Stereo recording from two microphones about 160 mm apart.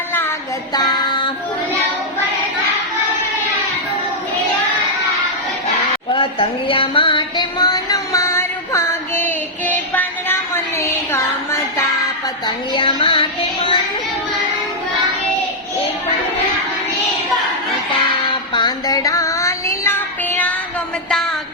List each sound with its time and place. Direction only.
0.7 s child singing: 25° left (ahead or behind)
6.1 s music: 35° left (ahead or behind); by 9.7 s 15° left (ahead or behind)
9.9 s a sound: 10° left (ahead or behind)
12.5 s child singing: 35° left (ahead or behind)
18.1 s music: 30° left (ahead or behind)